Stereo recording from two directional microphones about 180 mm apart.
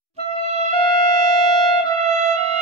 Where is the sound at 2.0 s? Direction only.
40° right (ahead or behind).